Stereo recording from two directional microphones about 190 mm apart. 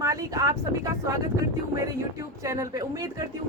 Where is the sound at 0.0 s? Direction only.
15° right (ahead or behind).